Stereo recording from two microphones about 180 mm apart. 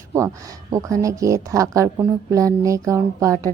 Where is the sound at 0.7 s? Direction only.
20° right (ahead or behind).